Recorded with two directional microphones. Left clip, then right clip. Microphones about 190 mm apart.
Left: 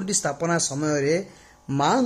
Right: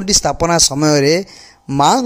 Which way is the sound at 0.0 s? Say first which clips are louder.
Right 11 dB; 30° right (ahead or behind).